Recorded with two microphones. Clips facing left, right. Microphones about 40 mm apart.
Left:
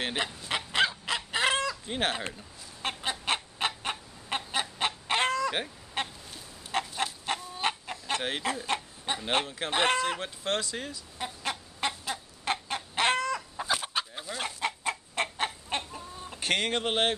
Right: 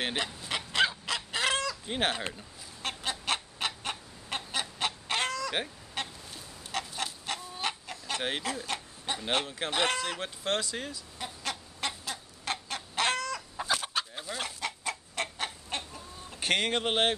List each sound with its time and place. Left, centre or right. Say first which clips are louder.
0.5 s fowl: left 1 dB; centre
1.9 s speech: right 2 dB; centre
2.8 s chicken: left 2 dB; centre
6.0 s goose: left 3 dB; left
6.7 s chicken: left 4 dB; left
8.2 s speech: even; centre
8.6 s a sound: left 4 dB; left
9.7 s speech: left 3 dB; left
9.9 s speech: left 5 dB; centre
10.2 s speech: even; centre
11.1 s chicken: left 3 dB; centre
13.6 s chicken: right 3 dB; centre
14.8 s chicken: left 3 dB; left
16.3 s speech: even; centre